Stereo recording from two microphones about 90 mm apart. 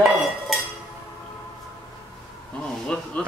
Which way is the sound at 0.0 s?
Centre (ahead or behind).